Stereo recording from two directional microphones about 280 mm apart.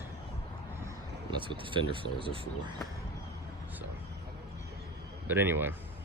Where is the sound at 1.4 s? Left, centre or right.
Centre.